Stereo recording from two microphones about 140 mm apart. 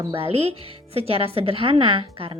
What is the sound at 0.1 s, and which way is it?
A woman's voice, 45° right (ahead or behind).